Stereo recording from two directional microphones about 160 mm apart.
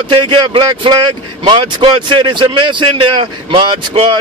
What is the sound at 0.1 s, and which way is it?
Speech, 30° right (ahead or behind).